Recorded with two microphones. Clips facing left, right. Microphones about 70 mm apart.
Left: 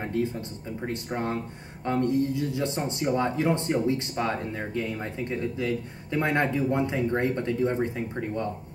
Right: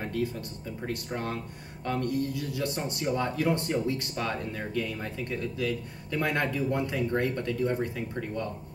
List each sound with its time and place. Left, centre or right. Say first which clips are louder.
0.0 s speech: left 3 dB; left